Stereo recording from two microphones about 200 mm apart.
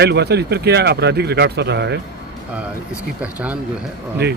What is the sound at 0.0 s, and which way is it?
Speech, 55° right (ahead or behind).